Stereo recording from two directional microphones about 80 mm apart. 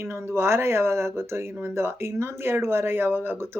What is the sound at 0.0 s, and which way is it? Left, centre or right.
Speech, right.